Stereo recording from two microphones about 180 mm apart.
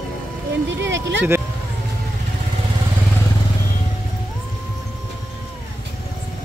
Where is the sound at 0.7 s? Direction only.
90° right.